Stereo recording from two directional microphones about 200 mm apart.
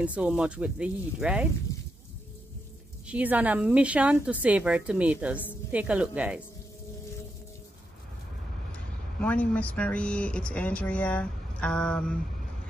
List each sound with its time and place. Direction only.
0.0 s a woman's voice: 5° right (ahead or behind)
3.1 s a woman's voice: 5° right (ahead or behind)
9.2 s speech: 5° left (ahead or behind)